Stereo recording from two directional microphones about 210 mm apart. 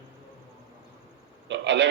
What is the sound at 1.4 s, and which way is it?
Speech, 55° right (ahead or behind).